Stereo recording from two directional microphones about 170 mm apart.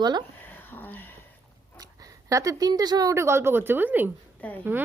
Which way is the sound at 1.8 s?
20° right (ahead or behind).